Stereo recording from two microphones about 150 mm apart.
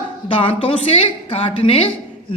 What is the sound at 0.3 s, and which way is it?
A woman's voice, 35° left (ahead or behind).